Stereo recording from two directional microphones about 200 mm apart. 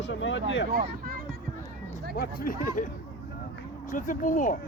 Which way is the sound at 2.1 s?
50° left (ahead or behind).